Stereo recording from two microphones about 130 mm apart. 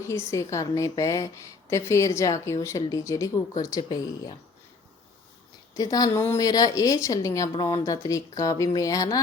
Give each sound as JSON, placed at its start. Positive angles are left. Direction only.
{"t": 0.0, "sound": "a woman's voice", "side_deg": 20}
{"t": 5.7, "sound": "a woman's voice", "side_deg": 30}